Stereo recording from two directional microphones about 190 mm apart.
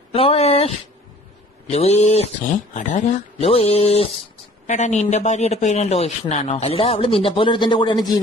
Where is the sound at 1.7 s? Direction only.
35° left (ahead or behind).